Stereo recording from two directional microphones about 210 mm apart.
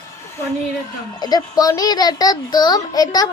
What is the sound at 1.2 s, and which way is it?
A child's voice, 20° left (ahead or behind).